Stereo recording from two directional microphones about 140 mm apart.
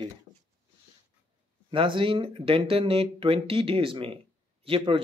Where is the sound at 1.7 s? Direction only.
35° right (ahead or behind).